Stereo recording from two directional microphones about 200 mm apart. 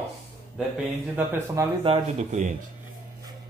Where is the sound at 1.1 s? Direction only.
15° right (ahead or behind).